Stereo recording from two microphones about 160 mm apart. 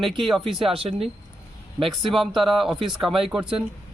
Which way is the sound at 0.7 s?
35° right (ahead or behind).